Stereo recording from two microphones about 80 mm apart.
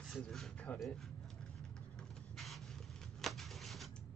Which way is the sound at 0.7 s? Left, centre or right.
Left.